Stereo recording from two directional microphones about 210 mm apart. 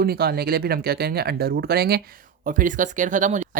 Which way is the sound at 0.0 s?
45° right (ahead or behind).